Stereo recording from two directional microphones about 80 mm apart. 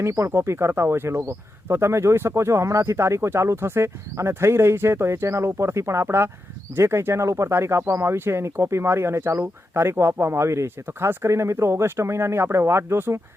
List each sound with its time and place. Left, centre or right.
0.0 s speech: right